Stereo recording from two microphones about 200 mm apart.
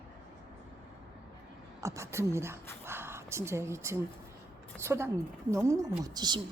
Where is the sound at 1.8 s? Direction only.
15° right (ahead or behind).